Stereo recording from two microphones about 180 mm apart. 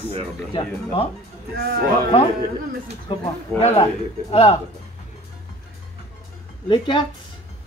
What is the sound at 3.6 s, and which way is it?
Speech, 30° left (ahead or behind).